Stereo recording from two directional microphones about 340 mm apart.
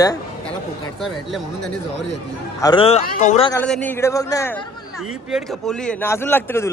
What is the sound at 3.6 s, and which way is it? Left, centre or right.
A man's voice, centre.